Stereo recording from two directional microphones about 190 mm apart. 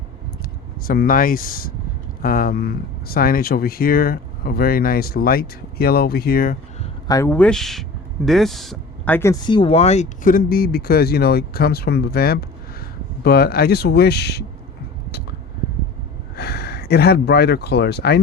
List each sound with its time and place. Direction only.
0.9 s speech: 50° left (ahead or behind)
7.1 s speech: 15° left (ahead or behind); by 14.4 s 60° left (ahead or behind)
16.3 s speech: 60° left (ahead or behind)